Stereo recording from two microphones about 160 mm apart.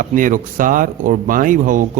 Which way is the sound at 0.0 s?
55° right (ahead or behind).